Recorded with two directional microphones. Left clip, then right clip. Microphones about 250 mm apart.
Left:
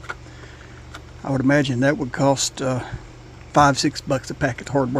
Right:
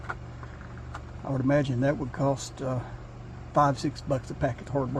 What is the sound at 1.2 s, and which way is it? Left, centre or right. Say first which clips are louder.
Speech: left 7 dB; left.